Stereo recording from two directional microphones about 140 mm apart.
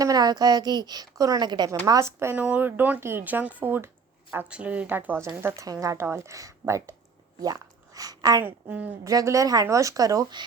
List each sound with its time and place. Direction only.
0.0 s a woman's voice: 25° right (ahead or behind)
1.8 s speech: 20° right (ahead or behind)
8.4 s speech: 10° right (ahead or behind)
9.0 s a woman's voice: 25° right (ahead or behind)